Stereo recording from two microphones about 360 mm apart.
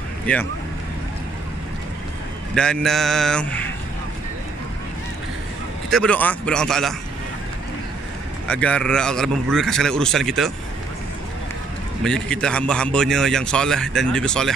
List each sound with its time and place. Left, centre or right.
0.3 s a man's voice: centre
2.5 s a man's voice: centre
5.9 s a man's voice: centre
8.5 s a man's voice: centre
12.0 s a man's voice: centre